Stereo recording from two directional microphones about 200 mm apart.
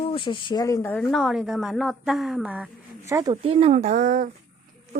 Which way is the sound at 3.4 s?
30° right (ahead or behind).